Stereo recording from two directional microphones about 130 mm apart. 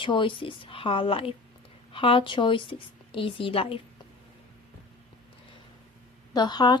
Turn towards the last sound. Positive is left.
turn(degrees=35)  # may be behind; listen again after turning